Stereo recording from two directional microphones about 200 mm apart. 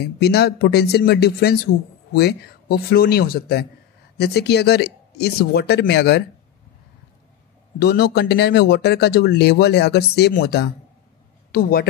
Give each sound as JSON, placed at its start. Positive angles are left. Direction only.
{"t": 0.0, "sound": "speech", "side_deg": 55}
{"t": 7.8, "sound": "speech", "side_deg": 55}